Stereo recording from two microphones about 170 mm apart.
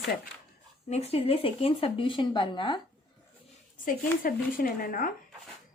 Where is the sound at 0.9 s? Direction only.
35° left (ahead or behind).